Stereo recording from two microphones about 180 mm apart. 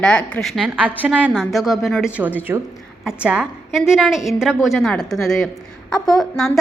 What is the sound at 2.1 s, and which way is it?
A woman's voice, 10° right (ahead or behind).